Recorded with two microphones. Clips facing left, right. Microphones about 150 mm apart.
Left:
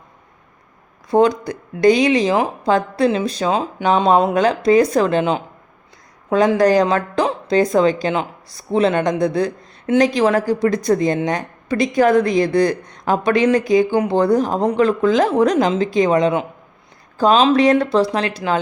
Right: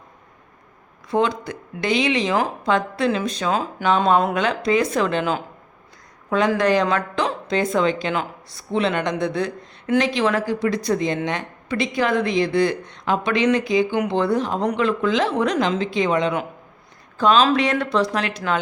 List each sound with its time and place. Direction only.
1.1 s speech: 40° left (ahead or behind)
6.6 s speech: 35° left (ahead or behind)